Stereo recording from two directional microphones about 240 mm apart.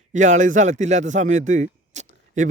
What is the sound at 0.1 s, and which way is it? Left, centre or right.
A man's voice, right.